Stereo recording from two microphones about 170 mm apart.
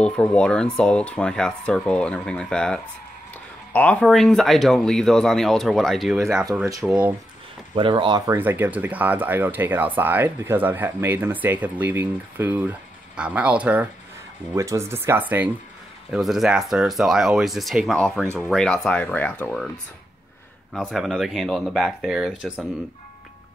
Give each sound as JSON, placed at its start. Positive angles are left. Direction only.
{"t": 0.0, "sound": "speech", "side_deg": 5}
{"t": 6.5, "sound": "speech", "side_deg": -15}
{"t": 7.7, "sound": "speech", "side_deg": -30}
{"t": 8.3, "sound": "speech", "side_deg": -10}
{"t": 20.7, "sound": "speech", "side_deg": 0}